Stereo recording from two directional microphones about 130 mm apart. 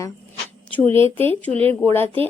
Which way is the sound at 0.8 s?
45° right (ahead or behind).